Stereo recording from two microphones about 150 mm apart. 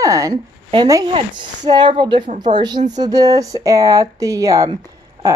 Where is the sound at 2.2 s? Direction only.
55° right (ahead or behind).